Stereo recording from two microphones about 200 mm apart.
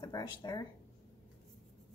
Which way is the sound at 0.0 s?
20° left (ahead or behind).